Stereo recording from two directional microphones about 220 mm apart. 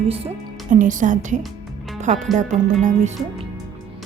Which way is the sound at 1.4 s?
Centre (ahead or behind).